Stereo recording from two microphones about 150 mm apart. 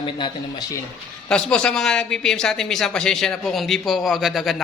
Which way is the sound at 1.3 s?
5° left (ahead or behind).